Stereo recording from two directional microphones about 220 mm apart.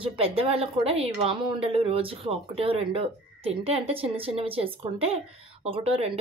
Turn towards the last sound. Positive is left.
turn(degrees=-25)  # may be behind; listen again after turning